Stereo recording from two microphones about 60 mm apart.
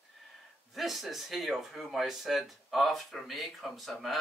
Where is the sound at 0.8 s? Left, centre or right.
Centre.